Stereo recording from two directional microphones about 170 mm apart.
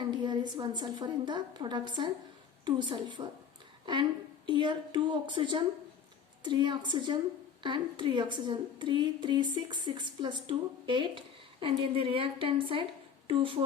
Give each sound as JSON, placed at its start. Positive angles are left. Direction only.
{"t": 0.0, "sound": "a woman's voice", "side_deg": -25}
{"t": 4.4, "sound": "a woman's voice", "side_deg": -30}